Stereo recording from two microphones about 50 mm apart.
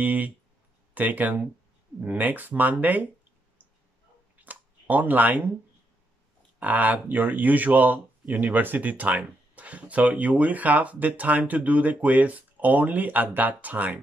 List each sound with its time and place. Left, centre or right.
0.0 s speech: right
4.5 s a sound: right
6.6 s speech: right